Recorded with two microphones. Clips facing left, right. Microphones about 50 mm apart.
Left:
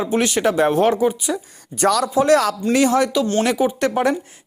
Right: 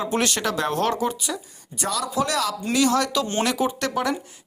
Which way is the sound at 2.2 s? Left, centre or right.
Left.